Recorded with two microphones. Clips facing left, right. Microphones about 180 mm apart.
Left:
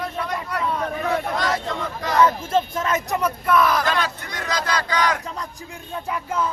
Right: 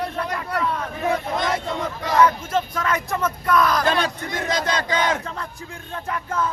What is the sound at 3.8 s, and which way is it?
Battle cry, 30° right (ahead or behind).